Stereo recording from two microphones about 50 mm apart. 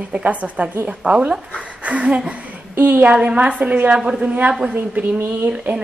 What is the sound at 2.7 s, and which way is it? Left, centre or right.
Speech, right.